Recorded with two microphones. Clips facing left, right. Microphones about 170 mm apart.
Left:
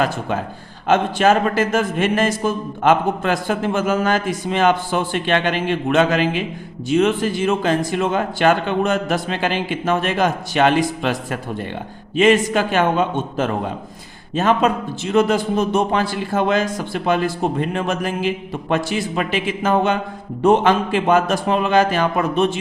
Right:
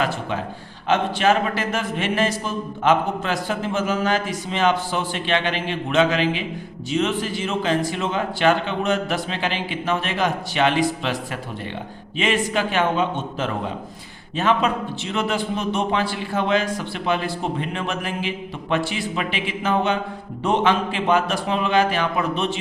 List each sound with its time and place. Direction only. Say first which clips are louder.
0.0 s a man's voice: left 3 dB; 45° left (ahead or behind)